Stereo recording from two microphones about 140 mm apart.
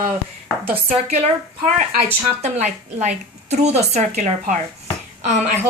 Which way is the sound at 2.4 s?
55° right (ahead or behind).